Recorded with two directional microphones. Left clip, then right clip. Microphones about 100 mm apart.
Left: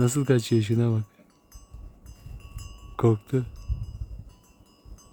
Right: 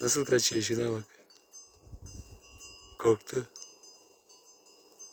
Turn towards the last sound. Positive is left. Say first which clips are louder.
# left 4 dB
turn(degrees=15)  # may be behind; listen again after turning